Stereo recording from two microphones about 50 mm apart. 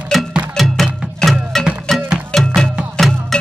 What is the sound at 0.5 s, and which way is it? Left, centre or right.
Music, centre.